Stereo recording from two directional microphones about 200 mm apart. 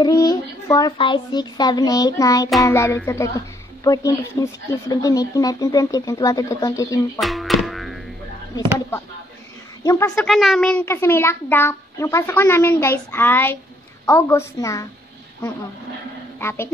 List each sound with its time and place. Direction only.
0.0 s a child's voice: 20° left (ahead or behind)
7.2 s music: centre (ahead or behind)
9.8 s a woman's voice: 15° left (ahead or behind)
10.2 s a woman's voice: centre (ahead or behind)
16.3 s a woman's voice: 10° left (ahead or behind)